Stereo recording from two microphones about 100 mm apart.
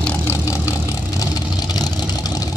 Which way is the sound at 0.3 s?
30° left (ahead or behind).